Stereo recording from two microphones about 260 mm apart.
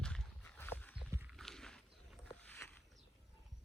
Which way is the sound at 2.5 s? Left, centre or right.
Centre.